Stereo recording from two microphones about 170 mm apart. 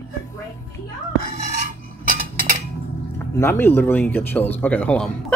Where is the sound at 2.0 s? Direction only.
55° right (ahead or behind).